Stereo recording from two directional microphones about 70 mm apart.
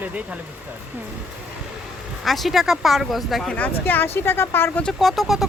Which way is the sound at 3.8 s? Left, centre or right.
Left.